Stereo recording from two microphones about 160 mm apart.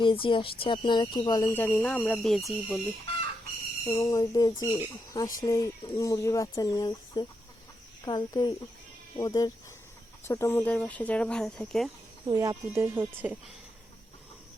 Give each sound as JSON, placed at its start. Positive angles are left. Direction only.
{"t": 0.0, "sound": "speech", "side_deg": 30}
{"t": 3.8, "sound": "speech", "side_deg": 20}
{"t": 12.2, "sound": "speech", "side_deg": -20}